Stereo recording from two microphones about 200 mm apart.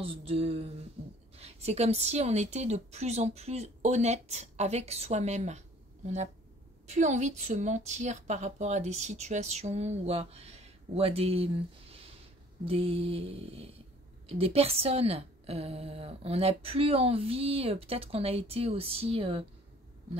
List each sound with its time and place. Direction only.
0.0 s a woman's voice: 30° right (ahead or behind)
1.0 s a sound: 30° right (ahead or behind)
1.3 s a woman's voice: 30° right (ahead or behind)
6.9 s a woman's voice: 35° right (ahead or behind)